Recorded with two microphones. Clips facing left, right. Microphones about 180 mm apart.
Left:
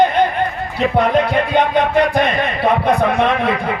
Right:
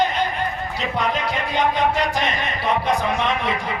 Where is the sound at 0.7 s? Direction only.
55° left (ahead or behind).